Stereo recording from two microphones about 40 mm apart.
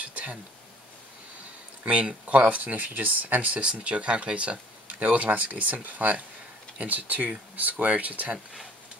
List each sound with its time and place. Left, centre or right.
0.0 s a sound: right
1.9 s speech: right
3.8 s speech: right